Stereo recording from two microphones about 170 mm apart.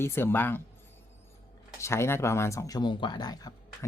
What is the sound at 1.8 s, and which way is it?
Speech, 15° left (ahead or behind).